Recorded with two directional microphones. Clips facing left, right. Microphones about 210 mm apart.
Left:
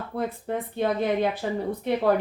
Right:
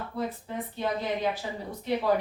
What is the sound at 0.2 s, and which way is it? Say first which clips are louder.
A woman's voice: left 5 dB; 55° left (ahead or behind).